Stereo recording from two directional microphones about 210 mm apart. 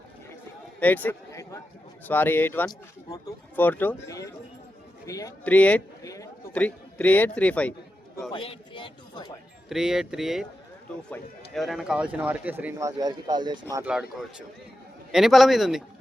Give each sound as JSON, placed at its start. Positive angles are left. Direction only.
{"t": 0.8, "sound": "a man's voice", "side_deg": 10}
{"t": 8.3, "sound": "speech", "side_deg": 25}
{"t": 9.6, "sound": "speech", "side_deg": 0}
{"t": 13.8, "sound": "speech", "side_deg": -5}